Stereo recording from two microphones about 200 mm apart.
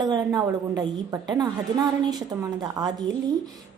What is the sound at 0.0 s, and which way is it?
A woman's voice, 20° right (ahead or behind).